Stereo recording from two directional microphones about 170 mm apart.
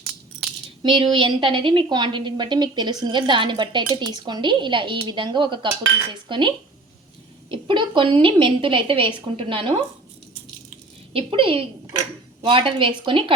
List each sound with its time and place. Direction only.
0.8 s a woman's voice: 30° right (ahead or behind)
7.5 s speech: 30° right (ahead or behind)
11.1 s speech: 30° right (ahead or behind)